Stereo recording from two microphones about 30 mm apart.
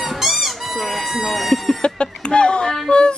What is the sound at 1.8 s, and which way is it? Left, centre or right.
Speech, left.